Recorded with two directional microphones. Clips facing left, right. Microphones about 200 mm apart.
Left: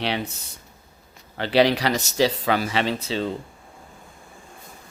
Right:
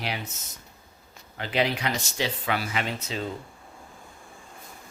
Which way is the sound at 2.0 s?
40° left (ahead or behind).